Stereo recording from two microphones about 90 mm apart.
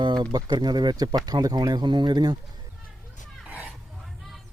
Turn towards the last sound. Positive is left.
turn(degrees=-15)  # may be behind; listen again after turning